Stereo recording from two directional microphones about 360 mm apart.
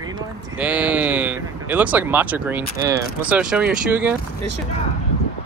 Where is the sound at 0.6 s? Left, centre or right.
Centre.